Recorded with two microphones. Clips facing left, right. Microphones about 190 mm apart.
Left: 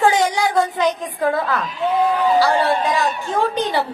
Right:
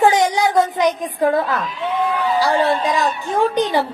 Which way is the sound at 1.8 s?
40° left (ahead or behind).